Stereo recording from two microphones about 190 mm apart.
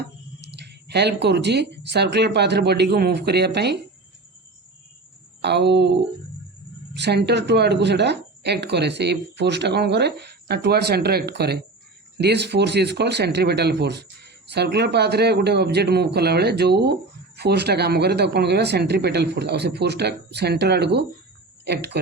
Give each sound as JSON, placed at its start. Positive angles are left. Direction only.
{"t": 0.0, "sound": "speech", "side_deg": -60}
{"t": 5.4, "sound": "speech", "side_deg": -65}
{"t": 6.9, "sound": "speech", "side_deg": -60}